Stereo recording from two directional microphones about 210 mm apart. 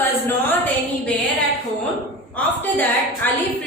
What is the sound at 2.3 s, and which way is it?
Speech, 10° left (ahead or behind).